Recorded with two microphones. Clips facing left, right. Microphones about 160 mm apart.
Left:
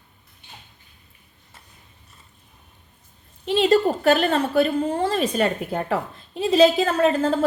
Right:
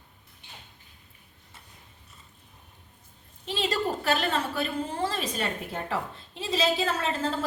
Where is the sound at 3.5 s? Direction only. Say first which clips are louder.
Left 10 dB; 45° left (ahead or behind).